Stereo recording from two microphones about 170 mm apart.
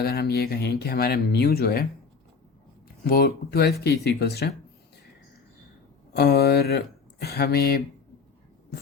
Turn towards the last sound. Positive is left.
turn(degrees=65)  # may be behind; listen again after turning